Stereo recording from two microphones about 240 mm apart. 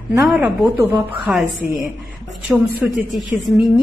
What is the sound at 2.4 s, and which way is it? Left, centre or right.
A woman's voice, centre.